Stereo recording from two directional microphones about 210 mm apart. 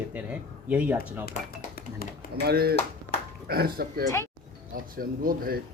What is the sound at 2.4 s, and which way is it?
Speech, 50° right (ahead or behind).